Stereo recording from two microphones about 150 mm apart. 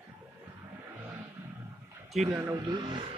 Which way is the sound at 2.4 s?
25° right (ahead or behind).